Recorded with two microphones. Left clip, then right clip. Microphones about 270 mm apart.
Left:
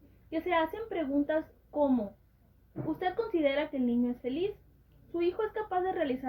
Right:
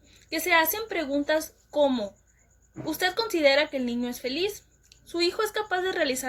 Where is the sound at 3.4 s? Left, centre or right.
Right.